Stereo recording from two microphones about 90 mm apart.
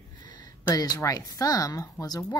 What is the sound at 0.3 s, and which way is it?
Speech, 50° left (ahead or behind).